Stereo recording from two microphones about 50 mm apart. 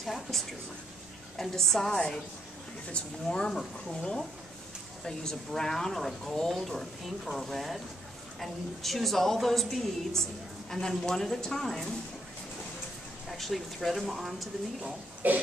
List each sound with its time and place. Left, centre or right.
0.0 s speech: centre
1.4 s speech: centre
13.3 s speech: centre
15.2 s burping: right